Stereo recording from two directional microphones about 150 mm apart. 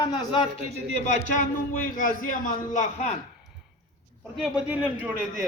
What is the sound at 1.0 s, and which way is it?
A man's voice, 55° left (ahead or behind).